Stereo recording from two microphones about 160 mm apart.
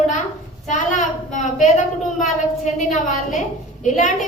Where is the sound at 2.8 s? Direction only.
50° left (ahead or behind).